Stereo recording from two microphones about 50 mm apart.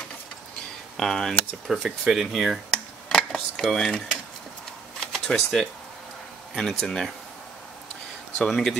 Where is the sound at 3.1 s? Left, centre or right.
Centre.